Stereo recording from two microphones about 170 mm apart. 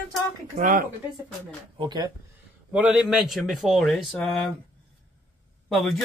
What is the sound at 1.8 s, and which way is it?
Speech, 25° right (ahead or behind).